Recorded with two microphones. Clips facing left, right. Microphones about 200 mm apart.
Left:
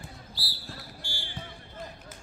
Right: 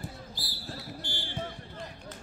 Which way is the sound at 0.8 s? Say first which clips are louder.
Right 4 dB; 20° right (ahead or behind).